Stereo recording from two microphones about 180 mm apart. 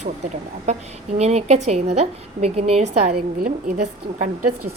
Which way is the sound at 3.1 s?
55° right (ahead or behind).